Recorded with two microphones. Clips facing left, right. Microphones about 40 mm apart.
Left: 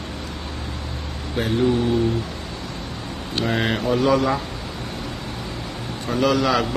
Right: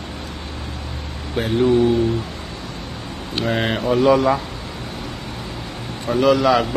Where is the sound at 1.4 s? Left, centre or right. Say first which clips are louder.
Right 2 dB; centre.